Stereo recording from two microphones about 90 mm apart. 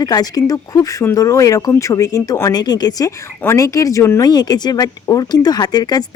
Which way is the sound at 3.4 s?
35° left (ahead or behind).